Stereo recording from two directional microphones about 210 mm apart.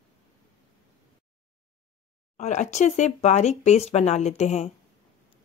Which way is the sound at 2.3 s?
35° left (ahead or behind).